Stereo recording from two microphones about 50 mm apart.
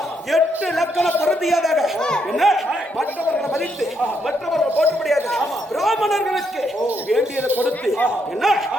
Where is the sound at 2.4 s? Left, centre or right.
Centre.